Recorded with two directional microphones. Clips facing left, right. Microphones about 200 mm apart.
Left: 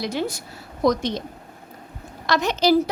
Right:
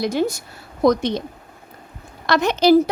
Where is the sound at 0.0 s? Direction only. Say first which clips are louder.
Right 5 dB; 45° right (ahead or behind).